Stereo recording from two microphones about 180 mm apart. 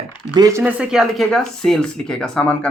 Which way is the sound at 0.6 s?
5° right (ahead or behind).